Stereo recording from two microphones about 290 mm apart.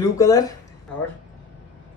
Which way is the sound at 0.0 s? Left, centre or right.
Centre.